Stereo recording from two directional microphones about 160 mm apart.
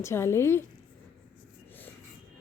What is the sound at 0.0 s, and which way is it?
Speech, 15° left (ahead or behind).